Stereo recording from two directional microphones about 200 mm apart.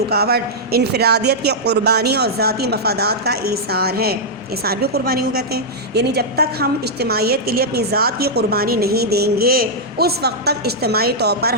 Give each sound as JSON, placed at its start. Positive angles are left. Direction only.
{"t": 0.1, "sound": "a woman's voice", "side_deg": -50}